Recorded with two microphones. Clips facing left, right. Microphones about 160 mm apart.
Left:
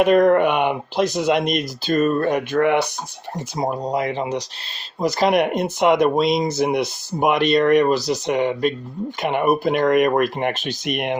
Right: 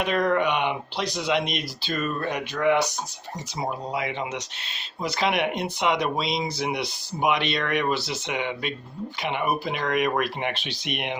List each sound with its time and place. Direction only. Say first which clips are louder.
0.0 s speech: left 9 dB; 50° left (ahead or behind)
3.6 s speech: left 7 dB; 40° left (ahead or behind)